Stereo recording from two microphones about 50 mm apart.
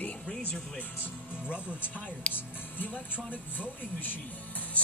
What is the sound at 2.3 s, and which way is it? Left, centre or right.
Music, left.